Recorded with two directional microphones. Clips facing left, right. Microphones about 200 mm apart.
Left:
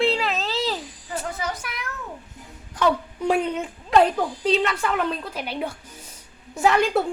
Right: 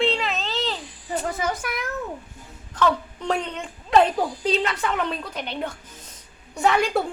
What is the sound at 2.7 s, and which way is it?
A woman's voice, 10° left (ahead or behind).